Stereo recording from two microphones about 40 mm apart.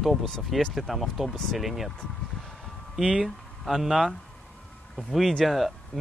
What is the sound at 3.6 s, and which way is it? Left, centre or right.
Speech, centre.